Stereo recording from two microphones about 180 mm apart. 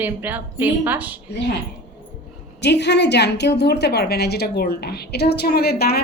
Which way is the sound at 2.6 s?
70° left (ahead or behind).